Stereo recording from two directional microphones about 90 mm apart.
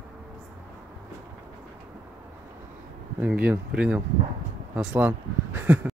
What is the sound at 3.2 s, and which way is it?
Speech, 15° right (ahead or behind).